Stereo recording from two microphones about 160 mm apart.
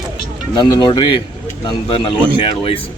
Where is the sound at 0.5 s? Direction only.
30° left (ahead or behind).